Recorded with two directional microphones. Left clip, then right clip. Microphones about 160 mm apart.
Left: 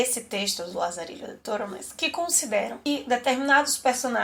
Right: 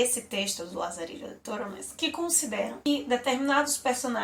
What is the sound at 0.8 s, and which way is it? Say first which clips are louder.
Speech: left 5 dB; 35° left (ahead or behind).